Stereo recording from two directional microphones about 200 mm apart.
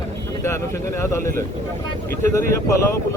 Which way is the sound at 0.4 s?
15° left (ahead or behind).